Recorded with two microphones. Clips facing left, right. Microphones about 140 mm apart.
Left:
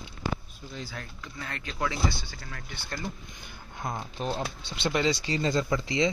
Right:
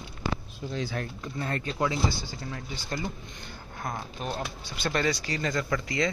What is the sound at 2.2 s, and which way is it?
Speech, 15° right (ahead or behind).